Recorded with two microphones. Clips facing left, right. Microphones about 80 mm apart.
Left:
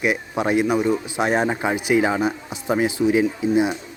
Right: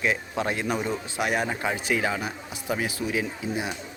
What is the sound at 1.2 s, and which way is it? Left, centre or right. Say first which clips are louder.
Speech: left 3 dB; left.